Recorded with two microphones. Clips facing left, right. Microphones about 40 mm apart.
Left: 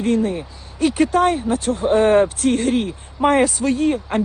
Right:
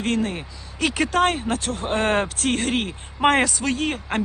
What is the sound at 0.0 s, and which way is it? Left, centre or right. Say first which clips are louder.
Speech: left 5 dB; right.